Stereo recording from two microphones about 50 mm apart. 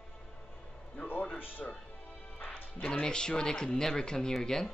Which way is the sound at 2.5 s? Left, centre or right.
Left.